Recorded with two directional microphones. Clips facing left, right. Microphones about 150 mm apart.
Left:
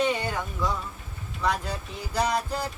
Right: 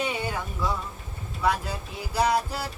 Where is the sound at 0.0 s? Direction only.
10° right (ahead or behind).